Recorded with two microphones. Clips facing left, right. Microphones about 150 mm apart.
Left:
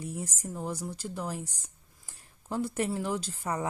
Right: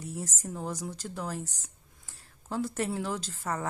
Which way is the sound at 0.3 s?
10° left (ahead or behind).